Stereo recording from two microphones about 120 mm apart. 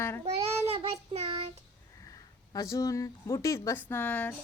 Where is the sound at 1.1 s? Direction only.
60° right (ahead or behind).